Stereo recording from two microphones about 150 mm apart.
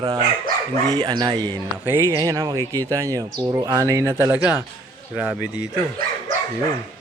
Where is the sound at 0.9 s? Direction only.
30° right (ahead or behind).